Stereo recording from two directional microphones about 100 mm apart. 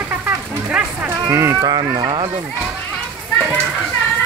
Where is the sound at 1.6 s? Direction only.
50° right (ahead or behind).